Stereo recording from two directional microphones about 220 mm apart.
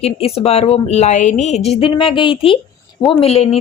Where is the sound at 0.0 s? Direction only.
25° left (ahead or behind).